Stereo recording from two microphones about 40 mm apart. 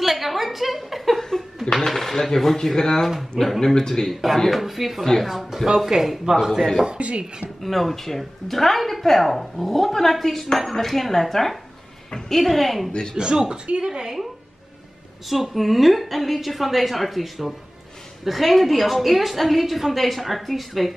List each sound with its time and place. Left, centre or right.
0.0 s a sound: centre
1.7 s speech: centre
4.1 s a woman's voice: centre
7.0 s speech: right
7.6 s a woman's voice: centre
13.1 s speech: centre
15.2 s a woman's voice: centre